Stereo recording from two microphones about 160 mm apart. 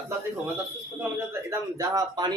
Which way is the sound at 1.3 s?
20° right (ahead or behind).